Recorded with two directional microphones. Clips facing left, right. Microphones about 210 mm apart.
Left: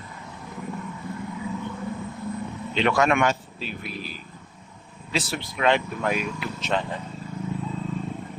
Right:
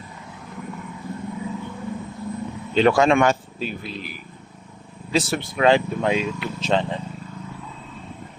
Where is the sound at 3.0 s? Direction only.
25° right (ahead or behind).